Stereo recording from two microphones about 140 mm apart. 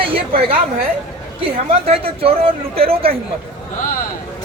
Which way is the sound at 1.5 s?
45° right (ahead or behind).